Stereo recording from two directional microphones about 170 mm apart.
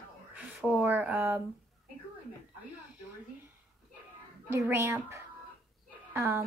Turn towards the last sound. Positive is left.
turn(degrees=-15)  # may be behind; listen again after turning